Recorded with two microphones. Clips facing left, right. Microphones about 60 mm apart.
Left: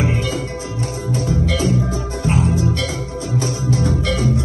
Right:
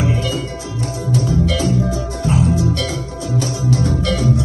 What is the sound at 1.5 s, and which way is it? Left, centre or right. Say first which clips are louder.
Music: right 1 dB; left.